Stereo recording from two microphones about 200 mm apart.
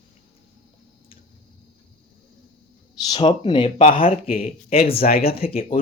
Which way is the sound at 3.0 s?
20° left (ahead or behind).